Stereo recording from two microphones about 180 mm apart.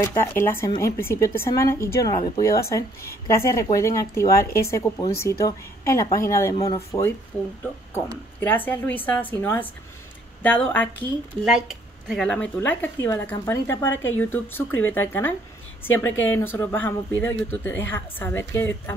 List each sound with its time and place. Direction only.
0.0 s speech: 15° left (ahead or behind)
0.7 s speech: 25° left (ahead or behind)
8.4 s speech: 10° left (ahead or behind)
11.4 s speech: centre (ahead or behind); by 13.8 s 15° left (ahead or behind)
13.8 s speech: 90° left
14.1 s a woman's voice: 10° left (ahead or behind)